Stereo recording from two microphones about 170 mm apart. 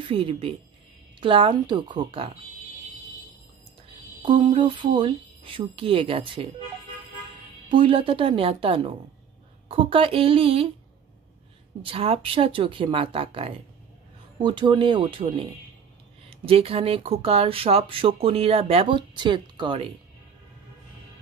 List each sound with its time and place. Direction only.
0.0 s a woman's voice: 30° right (ahead or behind)
4.2 s a woman's voice: 30° right (ahead or behind)
7.7 s speech: 30° right (ahead or behind)
11.8 s a woman's voice: 30° right (ahead or behind)
16.3 s speech: 35° right (ahead or behind)